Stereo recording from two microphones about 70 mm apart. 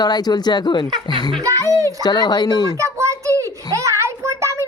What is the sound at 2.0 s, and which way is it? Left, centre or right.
Speech, left.